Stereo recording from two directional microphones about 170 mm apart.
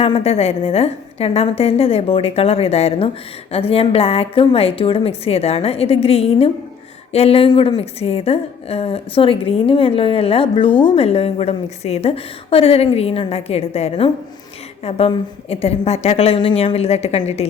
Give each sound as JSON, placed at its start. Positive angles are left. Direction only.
{"t": 0.0, "sound": "a woman's voice", "side_deg": 35}